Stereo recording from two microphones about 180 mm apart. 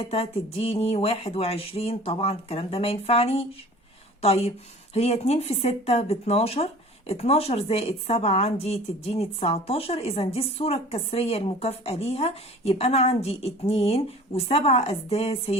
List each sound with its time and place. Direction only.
0.0 s a woman's voice: 35° left (ahead or behind)